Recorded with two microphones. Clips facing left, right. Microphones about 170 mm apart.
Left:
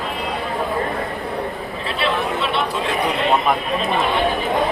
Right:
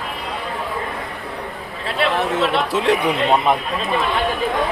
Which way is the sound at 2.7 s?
75° right (ahead or behind).